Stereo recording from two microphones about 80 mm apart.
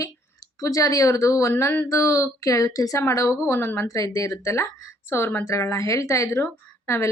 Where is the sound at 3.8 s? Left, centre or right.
Left.